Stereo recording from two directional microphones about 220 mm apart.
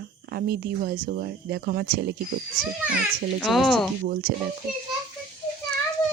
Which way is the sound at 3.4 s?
Centre (ahead or behind).